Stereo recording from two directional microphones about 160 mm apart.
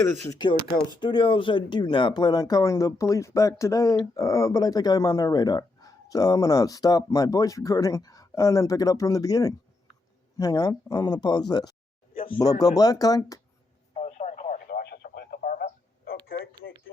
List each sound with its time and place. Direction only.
0.2 s speech: 25° left (ahead or behind)
13.9 s telephone: 45° left (ahead or behind)
14.7 s radio: 75° left (ahead or behind)